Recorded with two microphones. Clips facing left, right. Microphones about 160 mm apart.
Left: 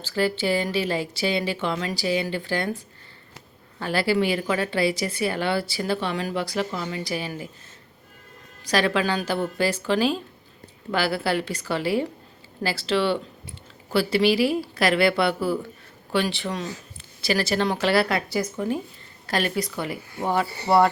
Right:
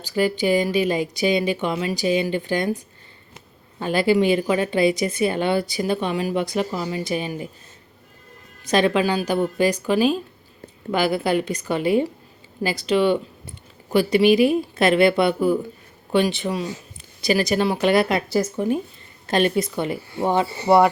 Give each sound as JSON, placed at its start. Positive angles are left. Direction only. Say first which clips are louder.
{"t": 0.0, "sound": "a woman's voice", "louder": "right 3 dB", "side_deg": -15}
{"t": 8.6, "sound": "a woman's voice", "louder": "right 4 dB", "side_deg": -20}